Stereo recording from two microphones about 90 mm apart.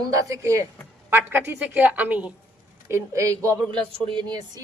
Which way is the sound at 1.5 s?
15° right (ahead or behind).